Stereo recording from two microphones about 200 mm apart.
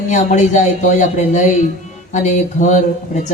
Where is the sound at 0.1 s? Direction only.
40° left (ahead or behind).